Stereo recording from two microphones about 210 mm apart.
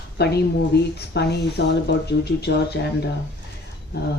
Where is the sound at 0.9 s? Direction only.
50° left (ahead or behind).